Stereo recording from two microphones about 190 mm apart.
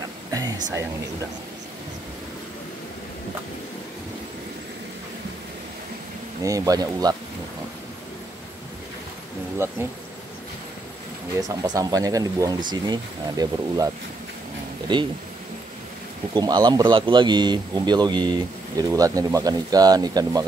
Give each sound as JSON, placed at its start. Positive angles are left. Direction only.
{"t": 0.3, "sound": "music", "side_deg": -20}
{"t": 6.4, "sound": "speech", "side_deg": -15}
{"t": 11.4, "sound": "speech", "side_deg": -20}
{"t": 16.3, "sound": "speech", "side_deg": -20}